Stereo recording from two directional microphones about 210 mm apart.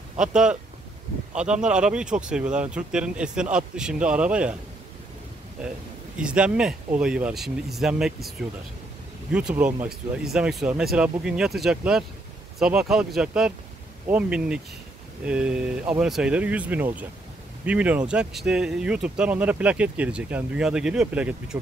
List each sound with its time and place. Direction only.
0.2 s speech: 5° right (ahead or behind)
6.1 s speech: 5° right (ahead or behind)